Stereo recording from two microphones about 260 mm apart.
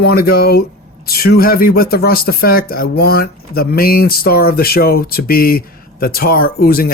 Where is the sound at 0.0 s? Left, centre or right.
Left.